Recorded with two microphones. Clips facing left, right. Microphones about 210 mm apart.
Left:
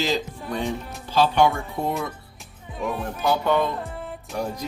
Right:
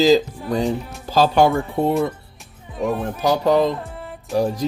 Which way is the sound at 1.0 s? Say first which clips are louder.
Right 3 dB; 40° right (ahead or behind).